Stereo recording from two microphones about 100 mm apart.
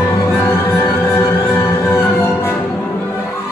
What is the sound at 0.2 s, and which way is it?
Music, 25° left (ahead or behind).